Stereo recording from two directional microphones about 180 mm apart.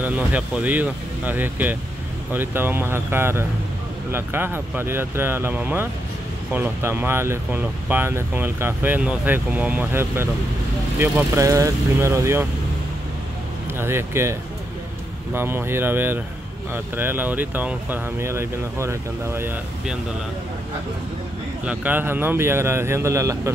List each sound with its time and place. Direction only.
0.0 s speech: 10° right (ahead or behind)
13.7 s speech: 15° right (ahead or behind)
15.3 s speech: 10° right (ahead or behind)
21.6 s speech: 10° right (ahead or behind)